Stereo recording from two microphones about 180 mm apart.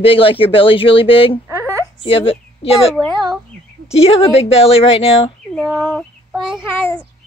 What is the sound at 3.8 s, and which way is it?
Speech, 35° left (ahead or behind).